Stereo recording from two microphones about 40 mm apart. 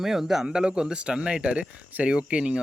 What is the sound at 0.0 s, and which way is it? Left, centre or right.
Speech, centre.